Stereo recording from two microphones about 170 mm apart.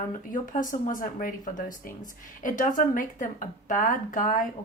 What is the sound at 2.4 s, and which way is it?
A woman's voice, 50° left (ahead or behind).